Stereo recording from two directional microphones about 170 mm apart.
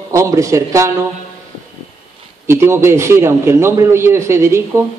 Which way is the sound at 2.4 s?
15° right (ahead or behind).